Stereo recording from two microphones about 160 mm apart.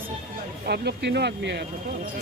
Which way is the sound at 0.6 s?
90° right.